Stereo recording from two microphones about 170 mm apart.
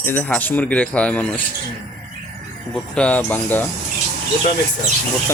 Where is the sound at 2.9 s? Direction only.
5° left (ahead or behind).